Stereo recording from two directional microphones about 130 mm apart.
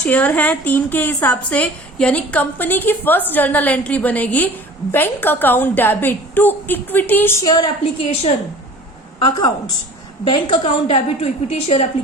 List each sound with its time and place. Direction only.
0.0 s a woman's voice: 10° left (ahead or behind)
7.4 s a woman's voice: 30° left (ahead or behind)
9.1 s a woman's voice: 35° left (ahead or behind); by 11.9 s 55° left (ahead or behind)